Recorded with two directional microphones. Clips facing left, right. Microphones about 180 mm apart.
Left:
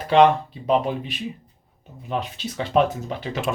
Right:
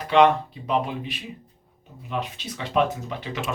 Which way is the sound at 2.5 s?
35° left (ahead or behind).